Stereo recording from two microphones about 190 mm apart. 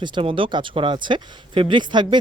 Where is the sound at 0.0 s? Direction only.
25° right (ahead or behind).